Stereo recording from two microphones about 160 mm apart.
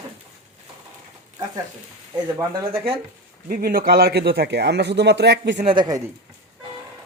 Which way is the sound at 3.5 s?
65° right (ahead or behind).